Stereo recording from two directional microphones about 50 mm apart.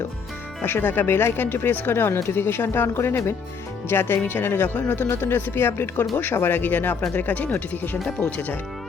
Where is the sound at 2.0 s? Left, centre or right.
Left.